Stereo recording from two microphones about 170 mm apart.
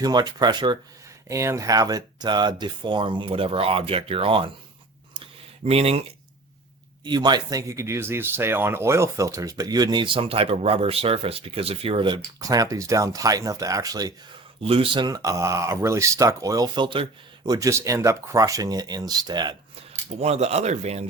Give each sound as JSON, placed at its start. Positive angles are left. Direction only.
{"t": 0.0, "sound": "speech", "side_deg": -25}
{"t": 5.1, "sound": "a sound", "side_deg": -35}
{"t": 7.0, "sound": "speech", "side_deg": -25}
{"t": 14.6, "sound": "speech", "side_deg": -35}
{"t": 20.1, "sound": "speech", "side_deg": -40}